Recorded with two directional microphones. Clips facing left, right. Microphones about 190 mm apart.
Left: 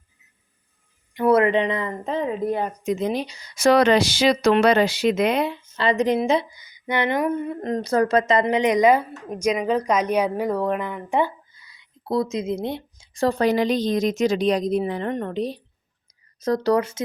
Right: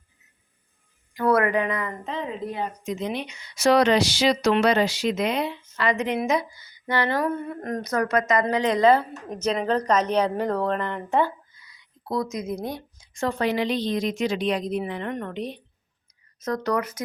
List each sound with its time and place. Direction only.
1.1 s speech: 25° left (ahead or behind)
2.0 s speech: 50° left (ahead or behind)
3.1 s speech: 35° left (ahead or behind); by 5.5 s 55° left (ahead or behind)
5.7 s a woman's voice: 30° left (ahead or behind)
6.6 s speech: 15° left (ahead or behind)
11.5 s speech: 30° left (ahead or behind)